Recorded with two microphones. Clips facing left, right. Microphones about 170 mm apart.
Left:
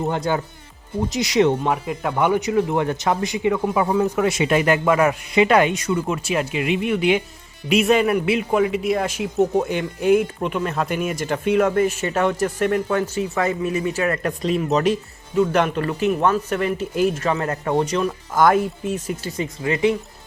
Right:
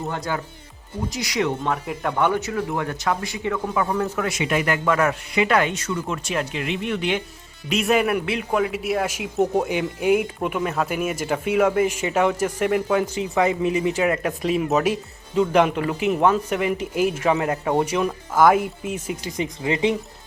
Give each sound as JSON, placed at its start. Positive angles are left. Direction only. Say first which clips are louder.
{"t": 0.1, "sound": "speech", "louder": "left 5 dB", "side_deg": 25}
{"t": 2.1, "sound": "speech", "louder": "left 4 dB", "side_deg": 15}
{"t": 4.3, "sound": "speech", "louder": "left 5 dB", "side_deg": 30}
{"t": 4.9, "sound": "speech", "louder": "left 3 dB", "side_deg": 15}